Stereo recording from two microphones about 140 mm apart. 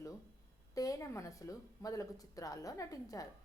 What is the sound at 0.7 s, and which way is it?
A woman's voice, 25° left (ahead or behind).